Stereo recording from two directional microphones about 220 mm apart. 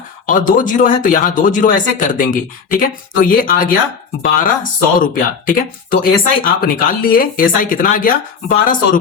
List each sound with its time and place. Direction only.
0.3 s speech: 35° left (ahead or behind)